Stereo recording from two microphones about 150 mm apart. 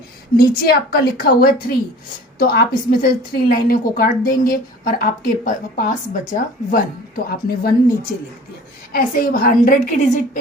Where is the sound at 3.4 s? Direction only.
75° left (ahead or behind).